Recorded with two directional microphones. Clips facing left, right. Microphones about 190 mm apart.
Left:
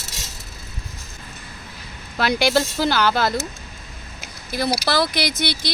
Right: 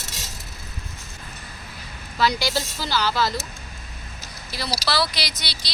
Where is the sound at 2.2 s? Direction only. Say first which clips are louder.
Left 4 dB; 60° left (ahead or behind).